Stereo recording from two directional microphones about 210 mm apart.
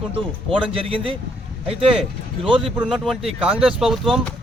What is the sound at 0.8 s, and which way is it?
Speech, 25° right (ahead or behind).